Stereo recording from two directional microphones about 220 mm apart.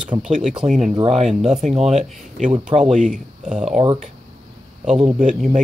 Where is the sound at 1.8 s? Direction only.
30° right (ahead or behind).